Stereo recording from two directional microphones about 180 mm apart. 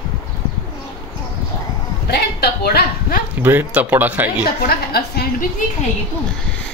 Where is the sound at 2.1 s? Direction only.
60° left (ahead or behind).